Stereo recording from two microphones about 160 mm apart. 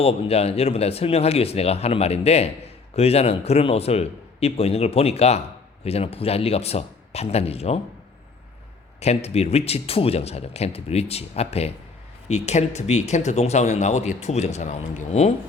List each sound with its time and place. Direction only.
0.0 s speech: 40° left (ahead or behind)
9.0 s speech: 40° left (ahead or behind)